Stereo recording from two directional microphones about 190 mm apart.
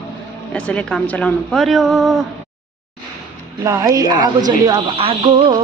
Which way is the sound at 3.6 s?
20° right (ahead or behind).